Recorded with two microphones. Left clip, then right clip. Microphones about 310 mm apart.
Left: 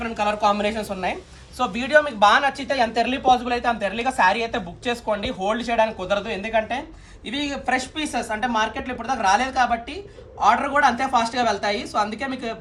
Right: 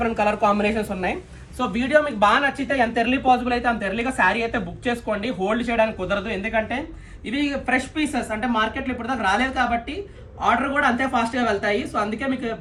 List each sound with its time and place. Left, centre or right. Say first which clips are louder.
0.0 s speech: right 1 dB; centre